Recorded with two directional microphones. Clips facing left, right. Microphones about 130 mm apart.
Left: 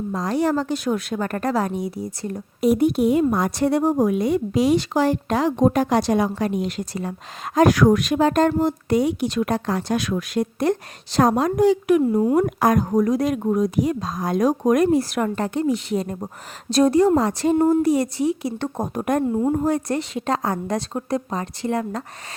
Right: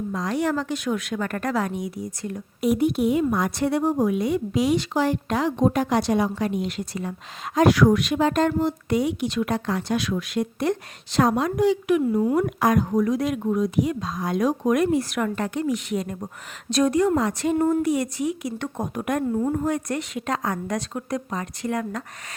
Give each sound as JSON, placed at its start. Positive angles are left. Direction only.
{"t": 0.1, "sound": "speech", "side_deg": 35}